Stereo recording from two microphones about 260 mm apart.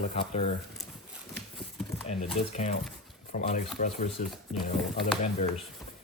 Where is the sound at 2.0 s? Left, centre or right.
Left.